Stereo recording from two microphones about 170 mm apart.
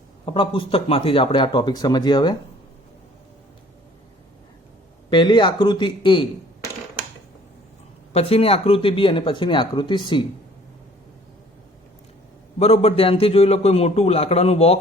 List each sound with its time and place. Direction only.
0.3 s speech: 30° left (ahead or behind)
5.0 s speech: 30° left (ahead or behind)
8.1 s a man's voice: 35° left (ahead or behind)
12.5 s a man's voice: 40° left (ahead or behind)